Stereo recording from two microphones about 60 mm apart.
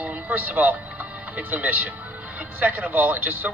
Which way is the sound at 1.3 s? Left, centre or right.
Right.